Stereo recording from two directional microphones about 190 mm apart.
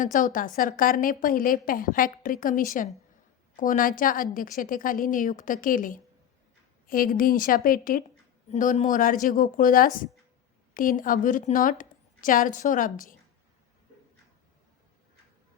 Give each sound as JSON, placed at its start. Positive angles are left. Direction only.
{"t": 0.0, "sound": "a woman's voice", "side_deg": 45}